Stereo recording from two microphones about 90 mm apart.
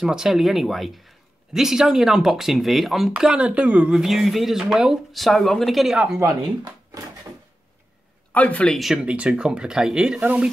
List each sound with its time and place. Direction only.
0.0 s speech: 5° right (ahead or behind)
6.9 s drawer open or close: 45° right (ahead or behind)
8.3 s a man's voice: 15° left (ahead or behind)
8.7 s speech: centre (ahead or behind)
9.0 s speech: 15° right (ahead or behind)